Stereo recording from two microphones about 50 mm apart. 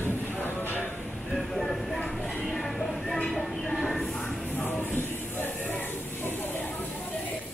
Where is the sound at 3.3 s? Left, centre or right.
Centre.